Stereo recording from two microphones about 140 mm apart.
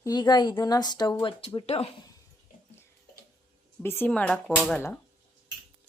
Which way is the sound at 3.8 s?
15° left (ahead or behind).